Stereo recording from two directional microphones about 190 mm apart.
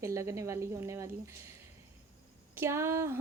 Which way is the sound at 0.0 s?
15° right (ahead or behind).